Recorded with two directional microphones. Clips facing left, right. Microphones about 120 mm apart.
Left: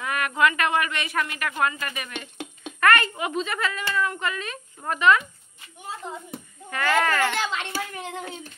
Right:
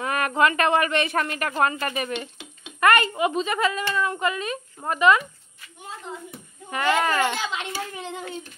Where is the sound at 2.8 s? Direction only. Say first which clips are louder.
Right 2 dB; 20° right (ahead or behind).